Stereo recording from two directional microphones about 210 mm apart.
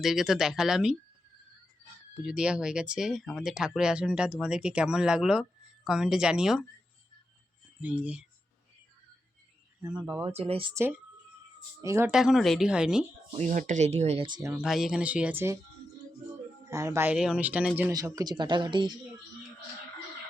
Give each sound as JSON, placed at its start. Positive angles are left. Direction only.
{"t": 0.0, "sound": "speech", "side_deg": 0}
{"t": 2.2, "sound": "speech", "side_deg": -5}
{"t": 7.8, "sound": "speech", "side_deg": -5}
{"t": 10.0, "sound": "speech", "side_deg": -20}
{"t": 10.8, "sound": "speech", "side_deg": -10}
{"t": 13.3, "sound": "speech", "side_deg": -35}
{"t": 14.3, "sound": "speech", "side_deg": -15}
{"t": 14.6, "sound": "speech", "side_deg": 0}
{"t": 16.6, "sound": "speech", "side_deg": -15}